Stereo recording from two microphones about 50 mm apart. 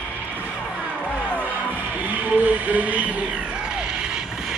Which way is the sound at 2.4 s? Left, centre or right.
Right.